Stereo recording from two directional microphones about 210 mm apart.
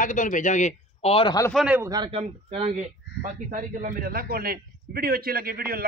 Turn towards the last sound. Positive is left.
turn(degrees=-45)  # may be behind; listen again after turning